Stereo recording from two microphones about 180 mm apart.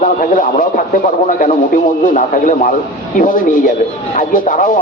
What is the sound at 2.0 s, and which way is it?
Speech, 45° left (ahead or behind).